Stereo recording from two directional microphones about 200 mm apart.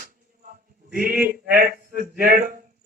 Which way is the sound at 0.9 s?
45° right (ahead or behind).